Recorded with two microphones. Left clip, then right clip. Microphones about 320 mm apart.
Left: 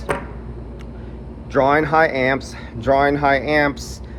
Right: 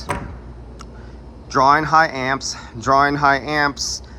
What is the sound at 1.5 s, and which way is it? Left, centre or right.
Speech, centre.